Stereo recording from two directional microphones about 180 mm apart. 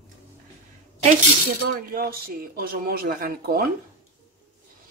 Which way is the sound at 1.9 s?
55° right (ahead or behind).